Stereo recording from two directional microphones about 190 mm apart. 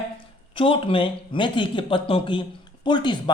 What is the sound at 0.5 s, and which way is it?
A man's voice, 30° left (ahead or behind).